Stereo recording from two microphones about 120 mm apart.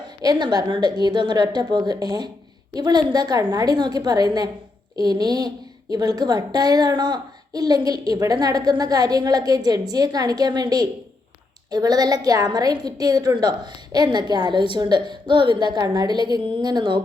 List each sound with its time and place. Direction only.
0.2 s a woman's voice: 35° right (ahead or behind)